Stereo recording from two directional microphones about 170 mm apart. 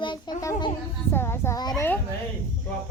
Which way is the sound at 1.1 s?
15° left (ahead or behind).